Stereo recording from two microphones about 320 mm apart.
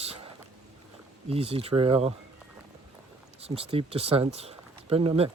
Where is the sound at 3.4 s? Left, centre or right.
Centre.